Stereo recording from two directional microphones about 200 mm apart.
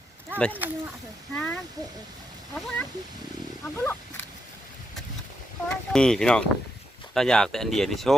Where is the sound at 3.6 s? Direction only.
10° left (ahead or behind).